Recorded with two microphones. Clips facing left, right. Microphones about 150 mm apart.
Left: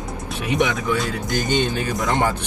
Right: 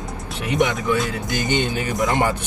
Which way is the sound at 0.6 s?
20° right (ahead or behind).